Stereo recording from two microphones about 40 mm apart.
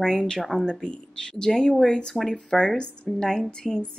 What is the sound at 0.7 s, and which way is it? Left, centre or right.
Speech, left.